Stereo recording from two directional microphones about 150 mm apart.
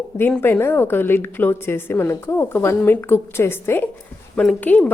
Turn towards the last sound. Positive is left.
turn(degrees=10)  # may be behind; listen again after turning